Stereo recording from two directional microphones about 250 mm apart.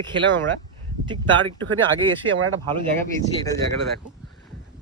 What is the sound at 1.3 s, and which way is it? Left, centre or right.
Speech, right.